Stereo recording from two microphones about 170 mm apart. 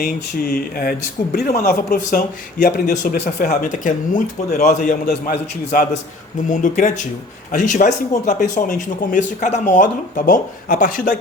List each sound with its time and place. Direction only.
0.8 s speech: 60° left (ahead or behind)
2.6 s speech: 55° left (ahead or behind)
6.5 s speech: 50° left (ahead or behind)